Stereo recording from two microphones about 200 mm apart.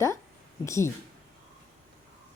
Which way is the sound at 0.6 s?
15° left (ahead or behind).